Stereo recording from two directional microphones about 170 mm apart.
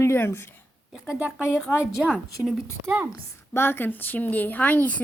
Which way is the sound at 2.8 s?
15° right (ahead or behind).